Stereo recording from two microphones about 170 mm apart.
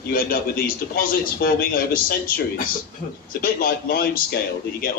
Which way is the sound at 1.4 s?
60° left (ahead or behind).